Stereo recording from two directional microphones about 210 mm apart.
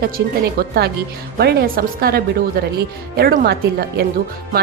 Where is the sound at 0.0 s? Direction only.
50° right (ahead or behind).